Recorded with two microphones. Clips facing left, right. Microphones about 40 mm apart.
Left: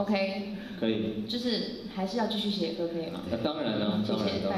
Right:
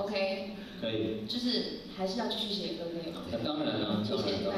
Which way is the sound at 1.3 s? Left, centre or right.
Left.